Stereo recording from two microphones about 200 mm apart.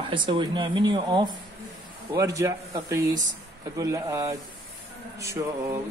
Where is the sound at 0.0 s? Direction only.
25° right (ahead or behind).